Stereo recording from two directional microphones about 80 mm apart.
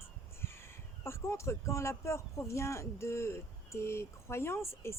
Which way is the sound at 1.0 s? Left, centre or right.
Left.